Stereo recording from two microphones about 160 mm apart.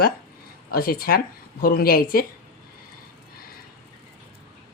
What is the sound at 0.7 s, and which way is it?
A woman's voice, 70° left (ahead or behind).